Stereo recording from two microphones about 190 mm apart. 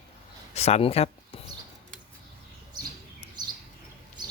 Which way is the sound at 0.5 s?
35° left (ahead or behind).